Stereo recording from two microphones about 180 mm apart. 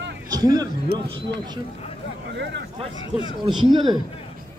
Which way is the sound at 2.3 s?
75° right (ahead or behind).